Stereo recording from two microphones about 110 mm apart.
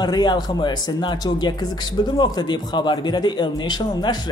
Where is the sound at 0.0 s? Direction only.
40° left (ahead or behind).